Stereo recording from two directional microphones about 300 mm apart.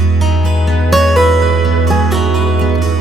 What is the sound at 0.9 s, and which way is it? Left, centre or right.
Music, centre.